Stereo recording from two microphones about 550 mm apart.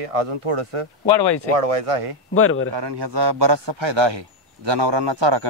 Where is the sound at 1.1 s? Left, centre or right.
Left.